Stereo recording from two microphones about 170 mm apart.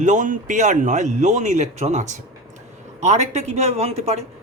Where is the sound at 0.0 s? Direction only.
45° right (ahead or behind).